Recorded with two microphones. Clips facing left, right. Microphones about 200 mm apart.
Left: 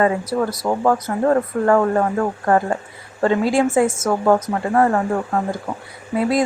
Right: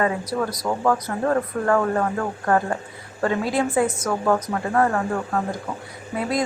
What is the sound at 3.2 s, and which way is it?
A woman's voice, 25° left (ahead or behind).